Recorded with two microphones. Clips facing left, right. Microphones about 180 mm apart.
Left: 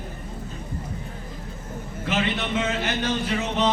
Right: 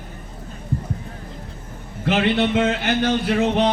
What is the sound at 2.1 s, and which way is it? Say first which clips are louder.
A man's voice: right 7 dB; 65° right (ahead or behind).